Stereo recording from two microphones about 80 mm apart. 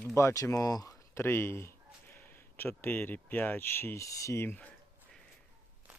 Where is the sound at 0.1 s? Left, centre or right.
Left.